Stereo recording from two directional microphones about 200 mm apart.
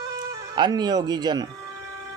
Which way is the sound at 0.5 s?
20° right (ahead or behind).